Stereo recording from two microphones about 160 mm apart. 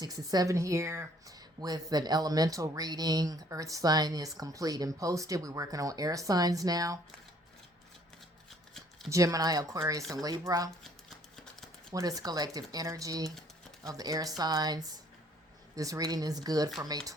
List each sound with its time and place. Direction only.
0.0 s speech: 25° right (ahead or behind)
8.4 s a sound: centre (ahead or behind)
9.0 s speech: 20° right (ahead or behind)
11.9 s speech: 20° right (ahead or behind)